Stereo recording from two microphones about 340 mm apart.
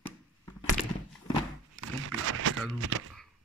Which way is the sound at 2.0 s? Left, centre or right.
Right.